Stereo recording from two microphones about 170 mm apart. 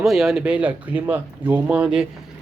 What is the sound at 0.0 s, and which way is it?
Speech, centre (ahead or behind).